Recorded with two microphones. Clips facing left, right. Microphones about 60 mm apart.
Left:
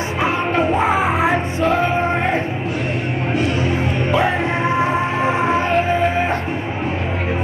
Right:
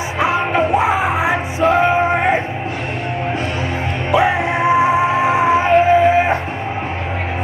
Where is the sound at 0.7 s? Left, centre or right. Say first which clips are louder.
Right 1 dB; centre.